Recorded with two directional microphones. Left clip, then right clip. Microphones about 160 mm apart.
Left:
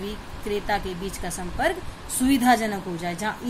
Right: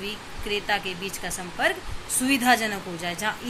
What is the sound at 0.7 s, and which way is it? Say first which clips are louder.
A woman's voice: even; 40° left (ahead or behind).